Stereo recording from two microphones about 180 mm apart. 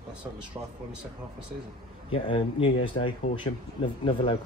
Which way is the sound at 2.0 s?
30° left (ahead or behind).